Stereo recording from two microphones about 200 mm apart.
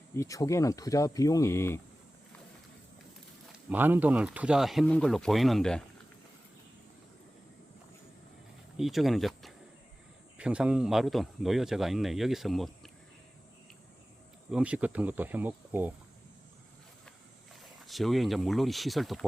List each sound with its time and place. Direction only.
0.2 s speech: 15° left (ahead or behind)
3.7 s speech: 10° right (ahead or behind)
8.8 s speech: centre (ahead or behind)
14.5 s speech: 5° right (ahead or behind)
17.7 s speech: centre (ahead or behind)